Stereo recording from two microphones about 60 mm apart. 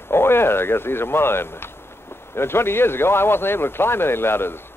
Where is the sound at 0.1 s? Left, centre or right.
Left.